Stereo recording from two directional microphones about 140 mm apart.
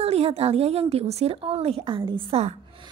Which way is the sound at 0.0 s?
45° right (ahead or behind).